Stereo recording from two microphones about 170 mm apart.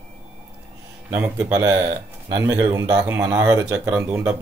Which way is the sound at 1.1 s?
5° right (ahead or behind).